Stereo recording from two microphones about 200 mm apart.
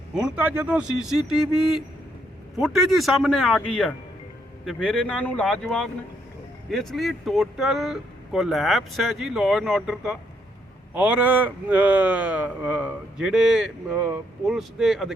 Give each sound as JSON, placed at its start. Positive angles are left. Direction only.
{"t": 0.1, "sound": "speech", "side_deg": -5}